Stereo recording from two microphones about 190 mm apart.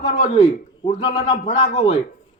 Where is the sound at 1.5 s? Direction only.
40° left (ahead or behind).